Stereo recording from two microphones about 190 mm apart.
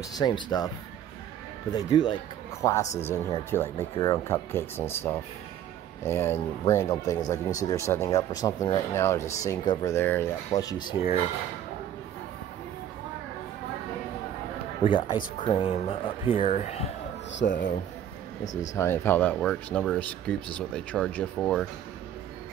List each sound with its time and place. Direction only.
0.2 s speech: 20° left (ahead or behind)
1.9 s speech: 25° left (ahead or behind)
14.8 s speech: 25° left (ahead or behind)
17.4 s speech: 55° left (ahead or behind)
18.4 s speech: 40° left (ahead or behind)
18.8 s speech: 10° left (ahead or behind)